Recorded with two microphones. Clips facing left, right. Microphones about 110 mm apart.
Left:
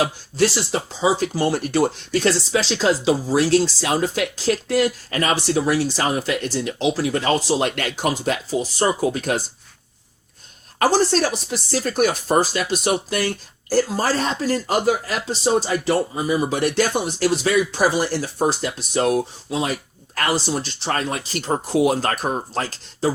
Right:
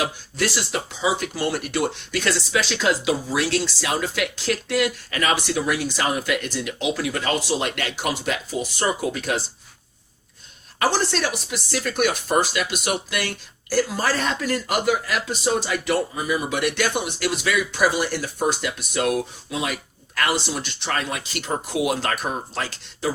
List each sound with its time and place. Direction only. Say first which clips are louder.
0.0 s speech: left 5 dB; 30° left (ahead or behind)
10.8 s speech: left 5 dB; 35° left (ahead or behind)